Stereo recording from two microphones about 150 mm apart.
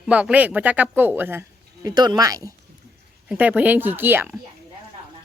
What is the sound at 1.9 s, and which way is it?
Speech, 25° right (ahead or behind).